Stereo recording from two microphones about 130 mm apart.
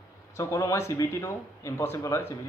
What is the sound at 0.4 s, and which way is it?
Speech, 25° left (ahead or behind).